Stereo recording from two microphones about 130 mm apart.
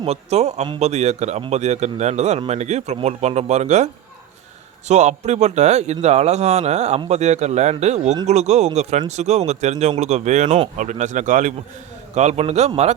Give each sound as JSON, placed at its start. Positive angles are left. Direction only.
{"t": 0.0, "sound": "a man's voice", "side_deg": -55}
{"t": 4.9, "sound": "a man's voice", "side_deg": -60}
{"t": 12.1, "sound": "a man's voice", "side_deg": -60}